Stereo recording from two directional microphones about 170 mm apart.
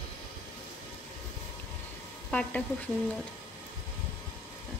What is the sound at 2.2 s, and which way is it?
Speech, 10° left (ahead or behind).